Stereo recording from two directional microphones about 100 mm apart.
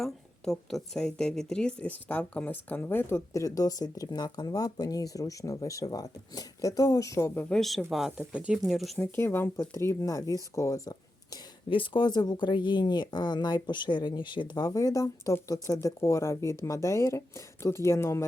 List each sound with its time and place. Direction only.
0.0 s speech: 5° left (ahead or behind); by 7.4 s 25° left (ahead or behind)
7.5 s speech: 5° left (ahead or behind)
8.3 s speech: 10° right (ahead or behind)
8.6 s speech: centre (ahead or behind)
9.0 s speech: 25° left (ahead or behind)
11.7 s speech: 50° left (ahead or behind); by 18.3 s 30° left (ahead or behind)